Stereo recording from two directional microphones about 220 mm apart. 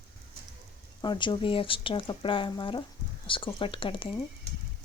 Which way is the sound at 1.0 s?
20° left (ahead or behind).